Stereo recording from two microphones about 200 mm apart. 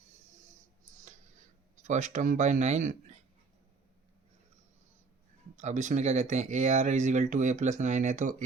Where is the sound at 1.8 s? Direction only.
35° right (ahead or behind).